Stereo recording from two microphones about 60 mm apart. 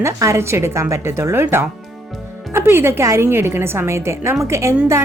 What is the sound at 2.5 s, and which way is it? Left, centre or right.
A woman's voice, right.